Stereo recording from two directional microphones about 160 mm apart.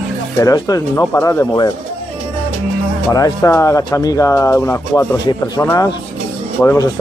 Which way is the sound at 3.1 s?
20° left (ahead or behind).